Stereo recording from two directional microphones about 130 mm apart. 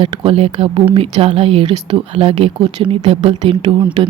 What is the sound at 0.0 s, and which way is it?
A woman's voice, 45° right (ahead or behind).